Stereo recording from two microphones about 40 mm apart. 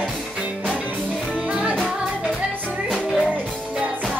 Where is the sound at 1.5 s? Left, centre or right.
Right.